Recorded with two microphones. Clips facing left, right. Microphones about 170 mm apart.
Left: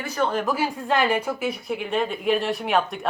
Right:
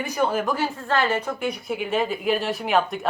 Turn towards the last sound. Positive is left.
turn(degrees=0)  # may be behind; listen again after turning